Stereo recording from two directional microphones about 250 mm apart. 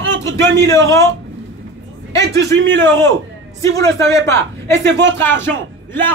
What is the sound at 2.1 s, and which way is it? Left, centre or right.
Speech, right.